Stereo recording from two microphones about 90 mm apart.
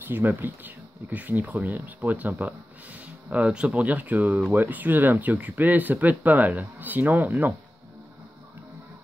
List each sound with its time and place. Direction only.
0.0 s speech: 20° right (ahead or behind)